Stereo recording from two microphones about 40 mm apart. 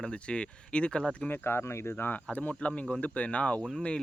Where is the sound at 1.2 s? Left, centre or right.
Left.